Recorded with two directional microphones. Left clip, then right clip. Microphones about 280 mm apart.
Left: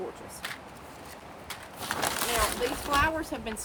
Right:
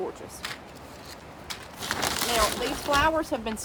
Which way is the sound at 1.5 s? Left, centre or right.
Centre.